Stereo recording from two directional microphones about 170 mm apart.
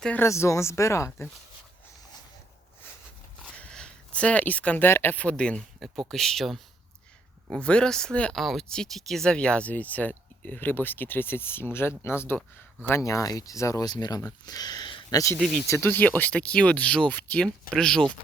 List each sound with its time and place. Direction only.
0.0 s speech: 10° left (ahead or behind)
3.6 s speech: 5° left (ahead or behind)
15.4 s speech: centre (ahead or behind)
15.6 s speech: 15° left (ahead or behind)